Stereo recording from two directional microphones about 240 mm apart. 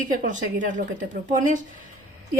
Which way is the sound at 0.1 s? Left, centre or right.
Right.